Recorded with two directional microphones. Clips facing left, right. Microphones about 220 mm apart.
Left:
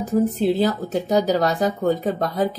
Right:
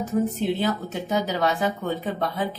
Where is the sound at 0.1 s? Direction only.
35° left (ahead or behind).